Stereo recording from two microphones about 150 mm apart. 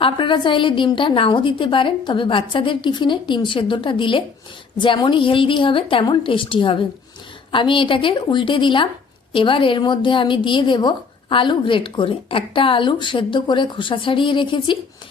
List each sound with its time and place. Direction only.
0.0 s a woman's voice: 35° left (ahead or behind)